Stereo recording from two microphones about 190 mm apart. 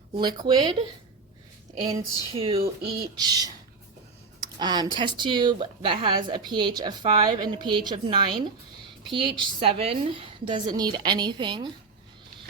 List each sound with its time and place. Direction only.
0.2 s a woman's voice: 20° right (ahead or behind)
2.4 s a woman's voice: 30° right (ahead or behind)
4.5 s a woman's voice: 20° right (ahead or behind)